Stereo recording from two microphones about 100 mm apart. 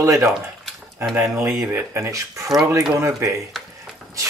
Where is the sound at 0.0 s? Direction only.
30° right (ahead or behind).